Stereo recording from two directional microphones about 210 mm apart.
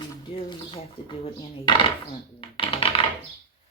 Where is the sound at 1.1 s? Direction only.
25° left (ahead or behind).